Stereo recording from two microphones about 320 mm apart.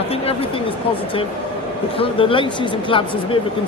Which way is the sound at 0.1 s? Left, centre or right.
Centre.